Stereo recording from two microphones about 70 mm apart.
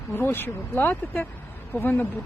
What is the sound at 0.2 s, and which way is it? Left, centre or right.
Speech, left.